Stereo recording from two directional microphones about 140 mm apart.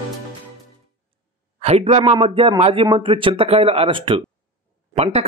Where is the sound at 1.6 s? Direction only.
50° right (ahead or behind).